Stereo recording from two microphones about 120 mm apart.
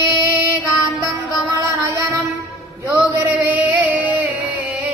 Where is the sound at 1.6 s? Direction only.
25° right (ahead or behind).